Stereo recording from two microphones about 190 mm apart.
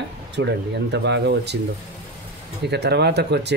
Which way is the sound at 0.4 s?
65° right (ahead or behind).